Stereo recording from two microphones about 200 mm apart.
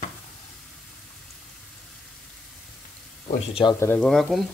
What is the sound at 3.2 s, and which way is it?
Speech, 30° left (ahead or behind).